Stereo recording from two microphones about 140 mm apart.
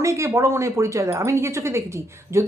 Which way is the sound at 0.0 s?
20° right (ahead or behind).